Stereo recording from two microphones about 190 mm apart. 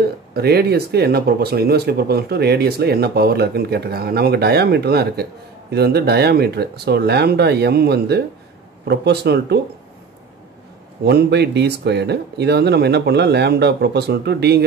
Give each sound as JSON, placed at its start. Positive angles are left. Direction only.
{"t": 0.3, "sound": "speech", "side_deg": -55}
{"t": 11.1, "sound": "speech", "side_deg": -60}